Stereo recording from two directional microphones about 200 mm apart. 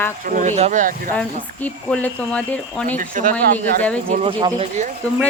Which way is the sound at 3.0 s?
40° right (ahead or behind).